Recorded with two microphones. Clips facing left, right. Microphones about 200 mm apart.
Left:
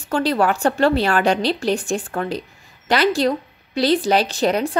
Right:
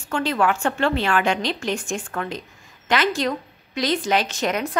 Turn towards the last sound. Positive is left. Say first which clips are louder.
# left 5 dB
turn(degrees=35)  # may be behind; listen again after turning